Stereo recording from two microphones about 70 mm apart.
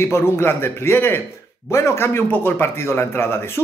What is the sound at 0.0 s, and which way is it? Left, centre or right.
Speech, left.